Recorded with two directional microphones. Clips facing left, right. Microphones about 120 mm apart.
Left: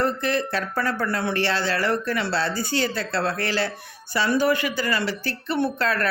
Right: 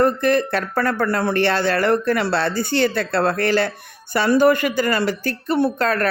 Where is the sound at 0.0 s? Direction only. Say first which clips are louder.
Right 6 dB; 50° right (ahead or behind).